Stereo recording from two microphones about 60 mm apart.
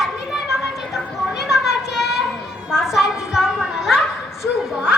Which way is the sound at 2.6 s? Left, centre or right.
Centre.